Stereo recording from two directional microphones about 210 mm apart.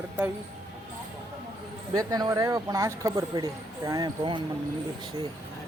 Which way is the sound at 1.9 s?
15° right (ahead or behind).